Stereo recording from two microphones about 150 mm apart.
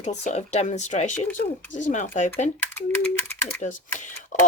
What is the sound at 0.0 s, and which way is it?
Speech, 50° left (ahead or behind).